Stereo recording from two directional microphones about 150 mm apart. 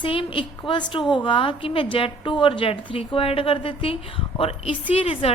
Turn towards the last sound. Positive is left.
turn(degrees=40)  # may be behind; listen again after turning